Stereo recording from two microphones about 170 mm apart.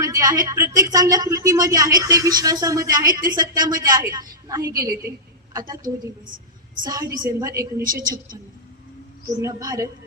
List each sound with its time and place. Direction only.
0.0 s a woman's voice: 20° right (ahead or behind)
6.8 s speech: 25° right (ahead or behind)
9.4 s speech: 20° right (ahead or behind)